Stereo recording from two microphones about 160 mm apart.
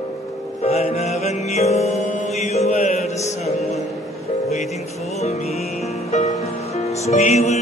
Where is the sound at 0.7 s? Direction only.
40° left (ahead or behind).